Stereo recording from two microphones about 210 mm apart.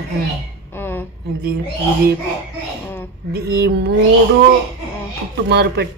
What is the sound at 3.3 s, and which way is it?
Speech, 50° right (ahead or behind).